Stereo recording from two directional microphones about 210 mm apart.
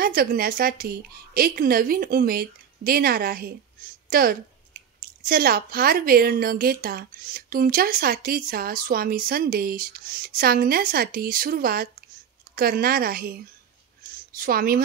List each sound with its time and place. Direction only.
0.0 s speech: 45° right (ahead or behind)